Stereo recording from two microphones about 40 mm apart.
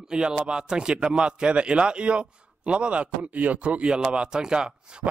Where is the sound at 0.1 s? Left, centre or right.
Centre.